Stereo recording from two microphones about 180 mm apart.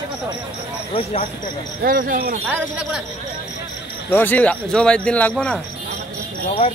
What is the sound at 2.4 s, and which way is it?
Speech, 5° right (ahead or behind).